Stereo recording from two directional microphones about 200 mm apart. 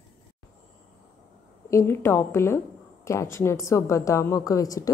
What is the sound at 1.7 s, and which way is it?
A woman's voice, 15° left (ahead or behind).